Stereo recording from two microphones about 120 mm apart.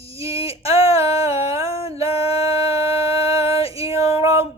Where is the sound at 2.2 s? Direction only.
55° left (ahead or behind).